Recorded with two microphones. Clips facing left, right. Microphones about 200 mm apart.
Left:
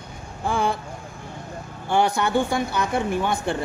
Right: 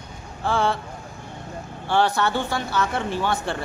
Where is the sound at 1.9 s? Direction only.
15° left (ahead or behind).